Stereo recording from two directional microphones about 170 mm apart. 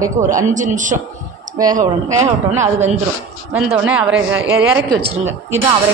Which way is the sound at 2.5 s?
45° right (ahead or behind).